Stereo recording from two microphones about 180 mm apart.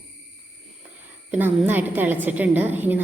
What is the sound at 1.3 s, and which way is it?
A woman's voice, 10° right (ahead or behind).